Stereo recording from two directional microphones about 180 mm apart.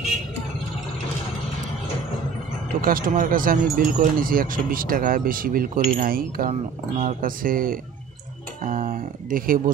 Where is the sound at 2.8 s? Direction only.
50° right (ahead or behind).